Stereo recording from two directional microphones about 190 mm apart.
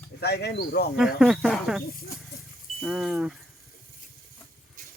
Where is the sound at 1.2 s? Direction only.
Centre (ahead or behind).